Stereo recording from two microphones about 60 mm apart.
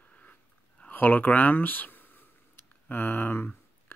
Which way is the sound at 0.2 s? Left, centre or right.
Left.